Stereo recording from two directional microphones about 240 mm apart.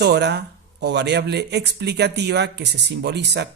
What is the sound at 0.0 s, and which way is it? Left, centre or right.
Speech, right.